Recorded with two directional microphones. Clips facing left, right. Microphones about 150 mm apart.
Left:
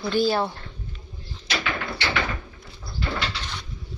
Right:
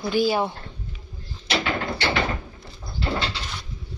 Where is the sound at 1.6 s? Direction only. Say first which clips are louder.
Right 2 dB; 35° right (ahead or behind).